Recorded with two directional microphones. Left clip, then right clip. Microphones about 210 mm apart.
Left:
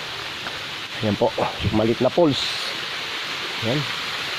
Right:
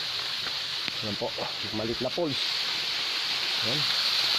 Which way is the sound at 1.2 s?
40° left (ahead or behind).